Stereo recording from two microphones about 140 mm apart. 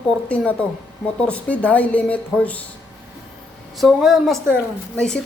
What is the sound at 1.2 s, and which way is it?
A woman's voice, 10° left (ahead or behind).